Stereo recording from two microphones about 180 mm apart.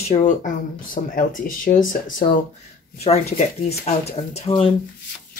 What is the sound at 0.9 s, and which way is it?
Speech, 50° left (ahead or behind).